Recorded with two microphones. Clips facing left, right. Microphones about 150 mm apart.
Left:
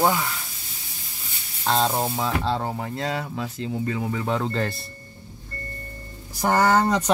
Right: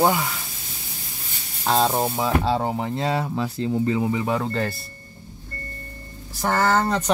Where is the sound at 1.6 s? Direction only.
10° right (ahead or behind).